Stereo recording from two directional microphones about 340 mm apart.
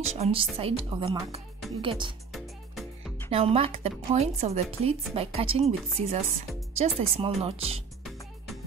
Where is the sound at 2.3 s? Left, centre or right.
Centre.